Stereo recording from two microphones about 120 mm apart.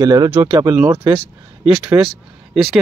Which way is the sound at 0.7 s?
15° right (ahead or behind).